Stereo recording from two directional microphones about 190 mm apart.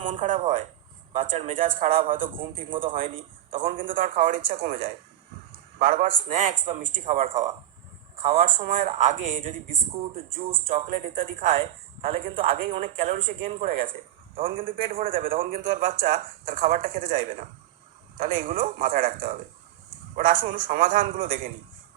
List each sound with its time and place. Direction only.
0.1 s a man's voice: 45° right (ahead or behind)
2.6 s speech: 25° right (ahead or behind)
3.6 s a man's voice: 45° right (ahead or behind)